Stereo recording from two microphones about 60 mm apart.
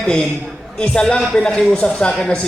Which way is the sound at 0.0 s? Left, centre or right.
Centre.